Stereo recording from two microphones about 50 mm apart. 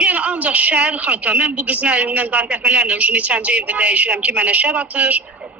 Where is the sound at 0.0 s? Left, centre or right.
Right.